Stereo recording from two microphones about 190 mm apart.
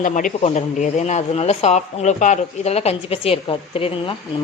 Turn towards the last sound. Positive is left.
turn(degrees=30)  # may be behind; listen again after turning